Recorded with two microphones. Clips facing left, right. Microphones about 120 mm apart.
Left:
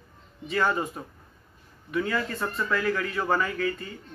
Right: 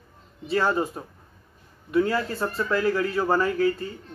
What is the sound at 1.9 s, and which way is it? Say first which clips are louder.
Speech: right 5 dB; 30° right (ahead or behind).